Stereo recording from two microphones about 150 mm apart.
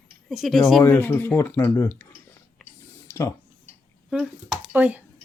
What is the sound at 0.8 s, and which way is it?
Speech, 15° left (ahead or behind).